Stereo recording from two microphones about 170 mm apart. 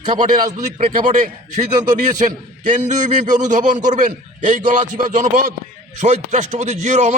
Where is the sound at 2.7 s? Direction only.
45° right (ahead or behind).